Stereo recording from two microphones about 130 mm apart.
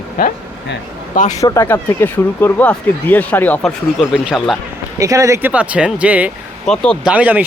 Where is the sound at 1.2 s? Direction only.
70° left (ahead or behind).